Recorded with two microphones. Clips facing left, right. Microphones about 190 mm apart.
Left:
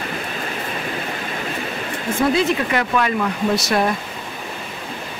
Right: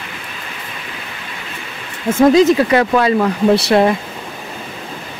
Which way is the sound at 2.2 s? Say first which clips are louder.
Right 9 dB; 40° right (ahead or behind).